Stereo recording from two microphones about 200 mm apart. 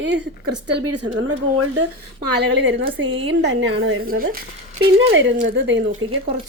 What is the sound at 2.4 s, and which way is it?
A woman's voice, 60° right (ahead or behind).